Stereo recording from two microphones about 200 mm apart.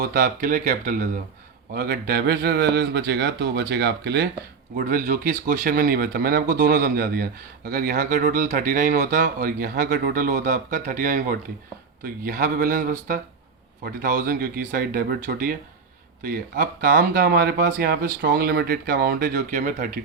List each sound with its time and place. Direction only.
0.0 s speech: 45° right (ahead or behind)